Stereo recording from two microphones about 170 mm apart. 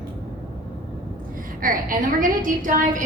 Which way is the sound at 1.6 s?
55° right (ahead or behind).